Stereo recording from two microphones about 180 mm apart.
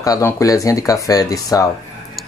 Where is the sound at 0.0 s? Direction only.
20° left (ahead or behind).